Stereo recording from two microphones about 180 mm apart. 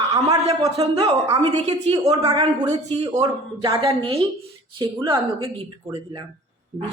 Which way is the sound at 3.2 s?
20° right (ahead or behind).